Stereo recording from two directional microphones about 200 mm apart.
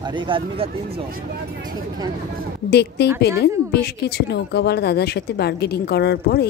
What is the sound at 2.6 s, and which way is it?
A woman's voice, 55° left (ahead or behind).